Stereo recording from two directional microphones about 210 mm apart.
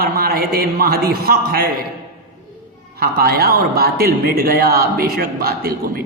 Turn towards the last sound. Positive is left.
turn(degrees=-45)  # may be behind; listen again after turning